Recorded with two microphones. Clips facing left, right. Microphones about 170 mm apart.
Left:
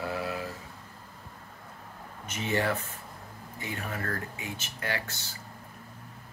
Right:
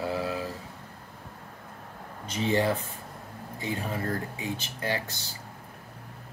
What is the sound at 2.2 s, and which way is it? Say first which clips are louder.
Speech: right 4 dB; 30° right (ahead or behind).